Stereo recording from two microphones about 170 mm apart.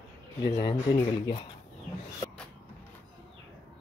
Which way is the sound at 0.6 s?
25° left (ahead or behind).